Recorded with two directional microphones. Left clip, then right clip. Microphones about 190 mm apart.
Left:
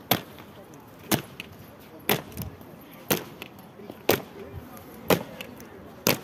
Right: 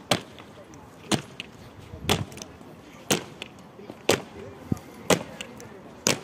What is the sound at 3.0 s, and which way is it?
Chop, 10° left (ahead or behind).